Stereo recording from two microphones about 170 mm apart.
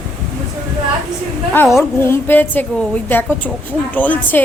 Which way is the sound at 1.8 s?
15° left (ahead or behind).